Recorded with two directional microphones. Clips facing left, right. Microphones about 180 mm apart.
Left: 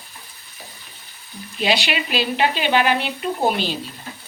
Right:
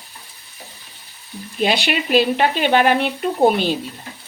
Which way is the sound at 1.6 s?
55° right (ahead or behind).